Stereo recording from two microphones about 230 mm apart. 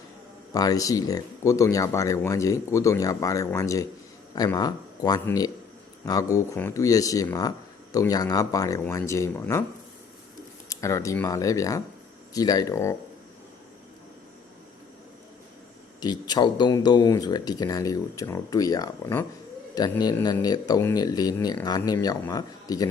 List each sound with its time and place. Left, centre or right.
0.5 s speech: centre
10.7 s speech: centre
16.0 s speech: centre